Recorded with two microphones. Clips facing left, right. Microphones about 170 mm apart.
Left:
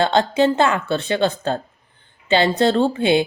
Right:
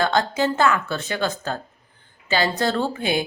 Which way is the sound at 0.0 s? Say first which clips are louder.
Left 4 dB; 25° left (ahead or behind).